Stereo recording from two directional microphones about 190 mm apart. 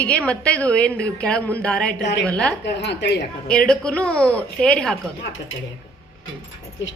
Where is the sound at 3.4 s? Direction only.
5° left (ahead or behind).